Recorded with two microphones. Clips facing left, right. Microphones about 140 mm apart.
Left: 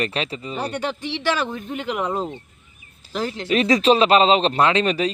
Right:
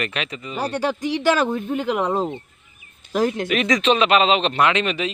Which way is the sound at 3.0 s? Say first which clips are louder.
Right 5 dB; 35° left (ahead or behind).